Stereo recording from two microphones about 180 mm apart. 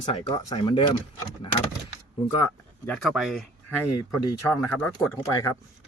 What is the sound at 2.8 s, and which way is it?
Speech, 5° left (ahead or behind).